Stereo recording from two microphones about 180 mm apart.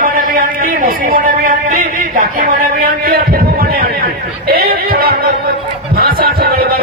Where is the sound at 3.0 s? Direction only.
55° right (ahead or behind).